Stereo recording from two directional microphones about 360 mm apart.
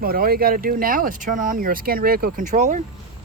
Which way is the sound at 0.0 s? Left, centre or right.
Right.